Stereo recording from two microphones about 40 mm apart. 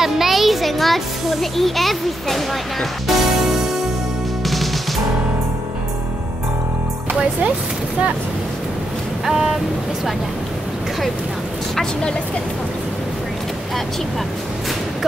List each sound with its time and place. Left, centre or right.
0.0 s a child's voice: centre
3.4 s music: centre
9.2 s vehicle: centre
11.8 s a woman's voice: left